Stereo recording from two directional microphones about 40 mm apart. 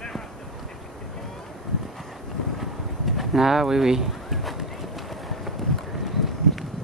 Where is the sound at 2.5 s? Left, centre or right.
Centre.